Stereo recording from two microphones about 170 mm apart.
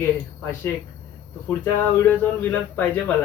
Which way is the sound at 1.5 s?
10° left (ahead or behind).